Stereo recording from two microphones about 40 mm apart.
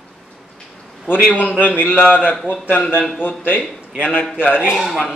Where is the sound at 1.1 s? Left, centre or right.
Left.